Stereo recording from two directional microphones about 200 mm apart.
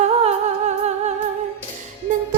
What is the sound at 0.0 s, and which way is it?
Humming, 35° right (ahead or behind).